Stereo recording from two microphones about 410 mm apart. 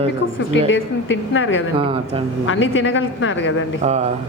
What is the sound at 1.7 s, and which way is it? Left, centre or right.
Speech, centre.